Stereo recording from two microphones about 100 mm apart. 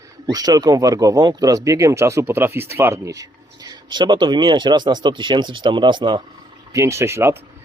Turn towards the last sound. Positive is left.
turn(degrees=-25)  # may be behind; listen again after turning